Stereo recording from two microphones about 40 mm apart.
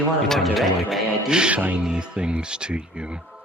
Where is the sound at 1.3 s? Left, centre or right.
Right.